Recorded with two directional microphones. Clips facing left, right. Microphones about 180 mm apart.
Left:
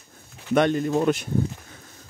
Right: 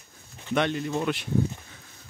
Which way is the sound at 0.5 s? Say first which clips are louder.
Left 6 dB; 45° left (ahead or behind).